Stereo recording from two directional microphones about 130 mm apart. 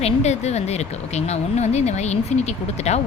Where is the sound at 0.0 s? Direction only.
55° left (ahead or behind).